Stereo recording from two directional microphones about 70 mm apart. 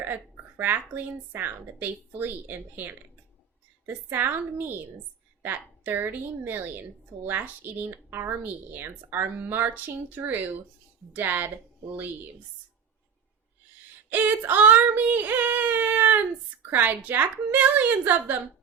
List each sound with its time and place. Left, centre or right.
0.0 s female singing: right
14.1 s female singing: right